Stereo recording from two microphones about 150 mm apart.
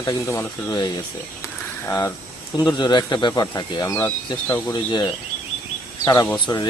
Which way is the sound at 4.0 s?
15° left (ahead or behind).